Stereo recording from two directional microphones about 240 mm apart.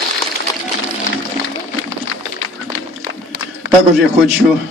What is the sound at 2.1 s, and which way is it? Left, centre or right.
Run, left.